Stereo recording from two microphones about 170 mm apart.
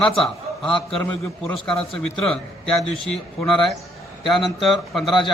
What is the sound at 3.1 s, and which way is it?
A man's voice, 5° left (ahead or behind).